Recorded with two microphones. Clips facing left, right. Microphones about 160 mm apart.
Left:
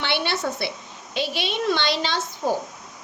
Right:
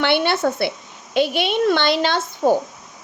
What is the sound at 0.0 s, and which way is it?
A woman's voice, 55° right (ahead or behind).